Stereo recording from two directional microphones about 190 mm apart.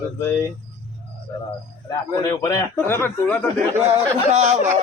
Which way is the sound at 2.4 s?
15° left (ahead or behind).